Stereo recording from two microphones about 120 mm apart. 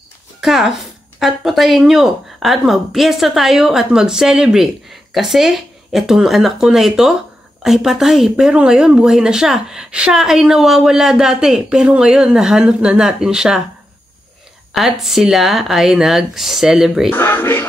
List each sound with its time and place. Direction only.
0.4 s speech: centre (ahead or behind)
14.7 s speech: centre (ahead or behind)
17.1 s music: 20° left (ahead or behind)